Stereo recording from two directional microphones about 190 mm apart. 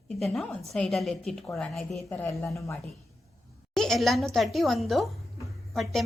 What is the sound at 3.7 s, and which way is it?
Speech, centre (ahead or behind).